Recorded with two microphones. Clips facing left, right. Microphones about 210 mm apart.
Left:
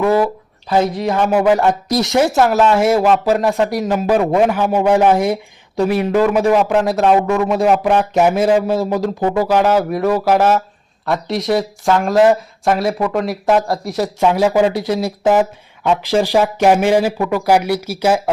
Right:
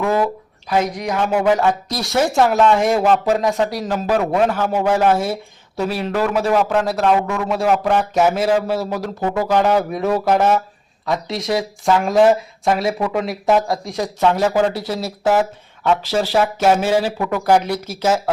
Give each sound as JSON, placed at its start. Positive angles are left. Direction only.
{"t": 0.0, "sound": "a sound", "side_deg": 10}
{"t": 0.7, "sound": "speech", "side_deg": 30}
{"t": 1.3, "sound": "speech", "side_deg": 10}
{"t": 1.9, "sound": "speech", "side_deg": 20}
{"t": 2.2, "sound": "speech", "side_deg": 5}
{"t": 7.0, "sound": "speech", "side_deg": 25}
{"t": 7.4, "sound": "speech", "side_deg": 20}